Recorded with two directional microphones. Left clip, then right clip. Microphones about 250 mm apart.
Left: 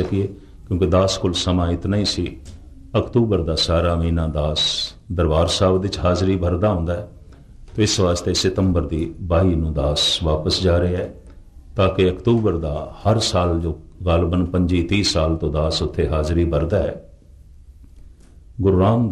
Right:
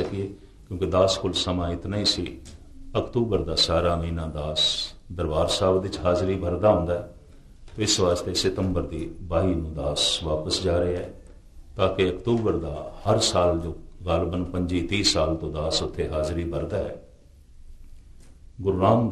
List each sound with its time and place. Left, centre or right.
0.7 s a man's voice: left
18.6 s a man's voice: left